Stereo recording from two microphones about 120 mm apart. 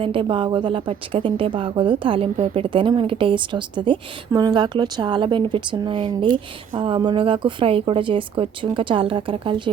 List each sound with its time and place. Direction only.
0.0 s a woman's voice: 45° right (ahead or behind)